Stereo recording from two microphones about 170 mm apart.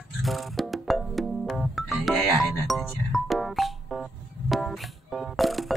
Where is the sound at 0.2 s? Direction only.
Centre (ahead or behind).